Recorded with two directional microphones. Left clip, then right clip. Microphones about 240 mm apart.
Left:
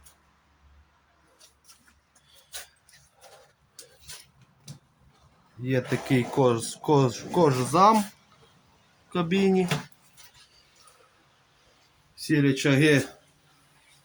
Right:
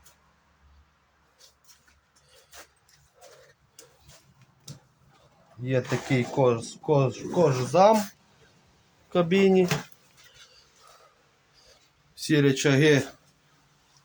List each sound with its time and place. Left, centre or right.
5.6 s speech: centre
9.1 s speech: centre
12.1 s speech: centre